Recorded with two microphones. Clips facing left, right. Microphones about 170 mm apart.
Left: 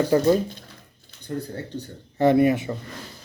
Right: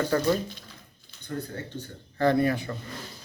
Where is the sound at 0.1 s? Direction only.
20° left (ahead or behind).